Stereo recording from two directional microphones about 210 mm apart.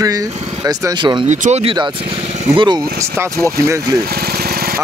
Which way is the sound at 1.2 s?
35° right (ahead or behind).